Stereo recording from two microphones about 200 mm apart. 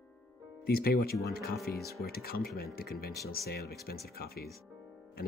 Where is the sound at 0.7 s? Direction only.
50° left (ahead or behind).